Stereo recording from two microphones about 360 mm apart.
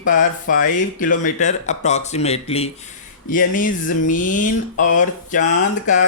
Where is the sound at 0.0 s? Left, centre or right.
Left.